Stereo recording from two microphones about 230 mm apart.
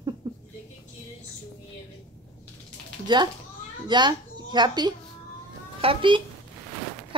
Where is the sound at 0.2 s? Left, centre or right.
Centre.